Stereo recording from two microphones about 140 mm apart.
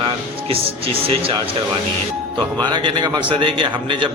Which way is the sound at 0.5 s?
40° right (ahead or behind).